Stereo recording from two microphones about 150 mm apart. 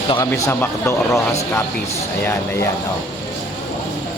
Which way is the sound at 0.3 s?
15° left (ahead or behind).